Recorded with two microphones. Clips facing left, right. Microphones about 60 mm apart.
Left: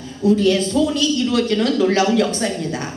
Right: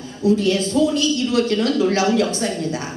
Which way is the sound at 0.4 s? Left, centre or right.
Left.